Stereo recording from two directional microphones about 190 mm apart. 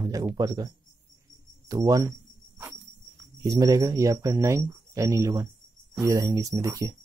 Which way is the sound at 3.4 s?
20° right (ahead or behind).